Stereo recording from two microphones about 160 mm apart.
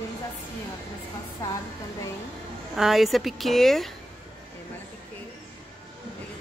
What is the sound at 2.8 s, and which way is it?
Speech, centre (ahead or behind).